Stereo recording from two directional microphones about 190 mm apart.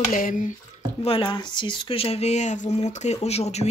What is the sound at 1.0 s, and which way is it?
Speech, 30° left (ahead or behind).